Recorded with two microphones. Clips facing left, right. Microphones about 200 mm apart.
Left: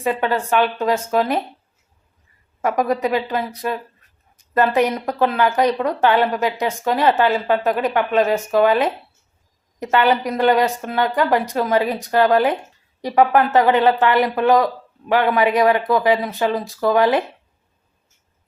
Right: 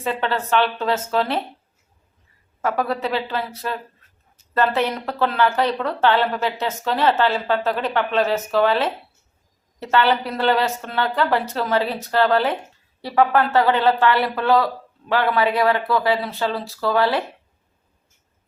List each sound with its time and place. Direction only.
0.0 s a woman's voice: 15° left (ahead or behind)
2.6 s a woman's voice: 15° left (ahead or behind)